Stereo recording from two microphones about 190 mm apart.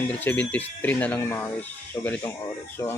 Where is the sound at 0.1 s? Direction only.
10° left (ahead or behind).